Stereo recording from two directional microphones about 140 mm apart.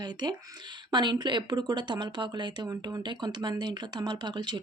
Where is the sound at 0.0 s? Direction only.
30° right (ahead or behind).